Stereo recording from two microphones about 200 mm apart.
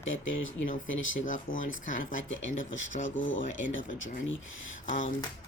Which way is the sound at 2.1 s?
70° left (ahead or behind).